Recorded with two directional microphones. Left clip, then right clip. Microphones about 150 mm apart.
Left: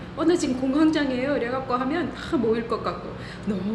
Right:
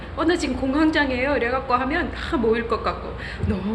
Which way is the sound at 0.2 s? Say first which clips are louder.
Right 1 dB; 20° left (ahead or behind).